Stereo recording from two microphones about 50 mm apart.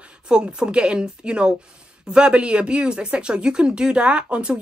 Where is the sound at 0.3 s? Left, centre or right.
Centre.